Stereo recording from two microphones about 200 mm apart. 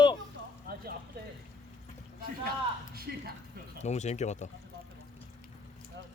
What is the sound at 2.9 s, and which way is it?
Speech, 50° right (ahead or behind).